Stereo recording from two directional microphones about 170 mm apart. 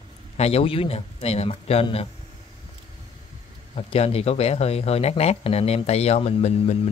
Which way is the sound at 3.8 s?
35° left (ahead or behind).